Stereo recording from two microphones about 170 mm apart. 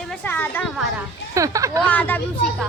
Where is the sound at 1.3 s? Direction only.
20° right (ahead or behind).